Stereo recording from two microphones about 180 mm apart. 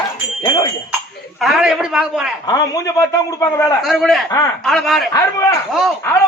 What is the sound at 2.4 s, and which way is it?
A man's voice, 20° left (ahead or behind).